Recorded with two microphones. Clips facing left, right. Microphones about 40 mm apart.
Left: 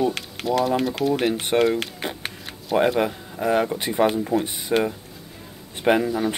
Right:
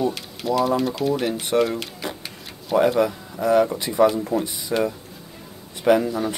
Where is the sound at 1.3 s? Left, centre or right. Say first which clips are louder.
Left 1 dB; left.